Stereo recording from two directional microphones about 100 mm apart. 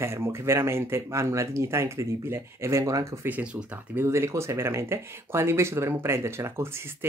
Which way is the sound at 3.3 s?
15° right (ahead or behind).